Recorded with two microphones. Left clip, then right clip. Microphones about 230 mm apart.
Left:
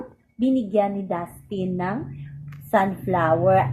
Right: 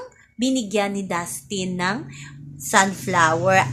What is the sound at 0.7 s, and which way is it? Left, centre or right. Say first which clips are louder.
A woman's voice: left 1 dB; right.